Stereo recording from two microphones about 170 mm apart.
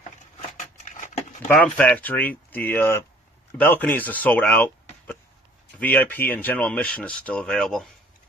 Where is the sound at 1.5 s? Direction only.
10° left (ahead or behind).